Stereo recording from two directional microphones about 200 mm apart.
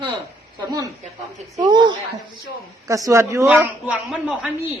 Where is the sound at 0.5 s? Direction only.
20° right (ahead or behind).